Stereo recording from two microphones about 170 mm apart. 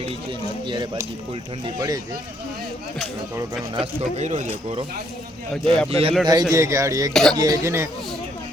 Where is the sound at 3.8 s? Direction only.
40° right (ahead or behind).